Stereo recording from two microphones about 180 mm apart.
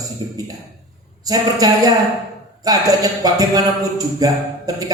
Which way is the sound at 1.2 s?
20° right (ahead or behind).